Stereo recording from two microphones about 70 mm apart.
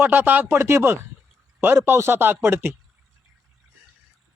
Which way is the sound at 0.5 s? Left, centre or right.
Right.